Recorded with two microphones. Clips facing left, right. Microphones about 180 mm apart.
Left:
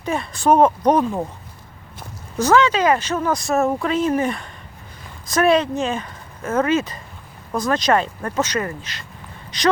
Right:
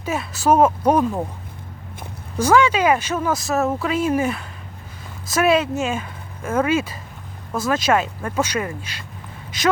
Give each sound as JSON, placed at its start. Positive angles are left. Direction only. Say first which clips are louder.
{"t": 0.0, "sound": "speech", "louder": "left 1 dB", "side_deg": -5}
{"t": 2.4, "sound": "speech", "louder": "even", "side_deg": -10}